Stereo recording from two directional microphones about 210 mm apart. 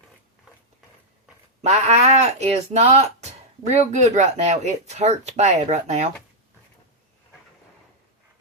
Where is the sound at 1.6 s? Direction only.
35° right (ahead or behind).